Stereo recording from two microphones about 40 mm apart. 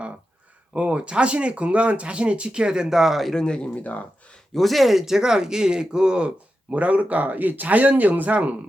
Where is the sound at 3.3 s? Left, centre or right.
Left.